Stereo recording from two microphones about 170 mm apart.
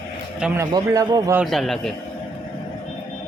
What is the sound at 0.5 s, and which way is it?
Speech, 20° right (ahead or behind).